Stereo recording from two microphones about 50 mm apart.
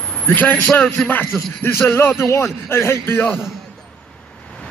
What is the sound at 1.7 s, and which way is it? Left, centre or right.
Speech, left.